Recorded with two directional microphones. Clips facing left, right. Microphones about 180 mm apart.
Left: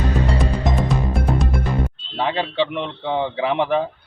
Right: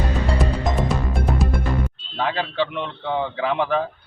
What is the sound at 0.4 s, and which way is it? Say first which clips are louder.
Music: left 1 dB; centre (ahead or behind).